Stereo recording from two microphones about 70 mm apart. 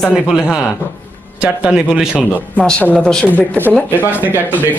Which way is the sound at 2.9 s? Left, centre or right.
Centre.